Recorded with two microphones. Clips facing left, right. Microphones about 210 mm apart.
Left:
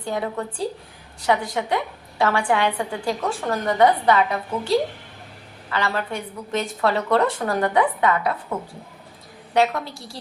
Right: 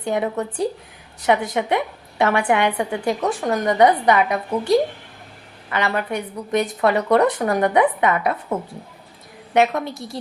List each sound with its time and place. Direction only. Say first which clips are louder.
0.0 s a woman's voice: right 4 dB; 20° right (ahead or behind)
5.7 s a woman's voice: right 3 dB; 20° right (ahead or behind)
9.6 s a woman's voice: right 2 dB; 20° right (ahead or behind)